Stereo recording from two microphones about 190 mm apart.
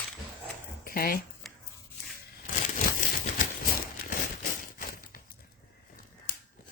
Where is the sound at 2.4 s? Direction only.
45° left (ahead or behind).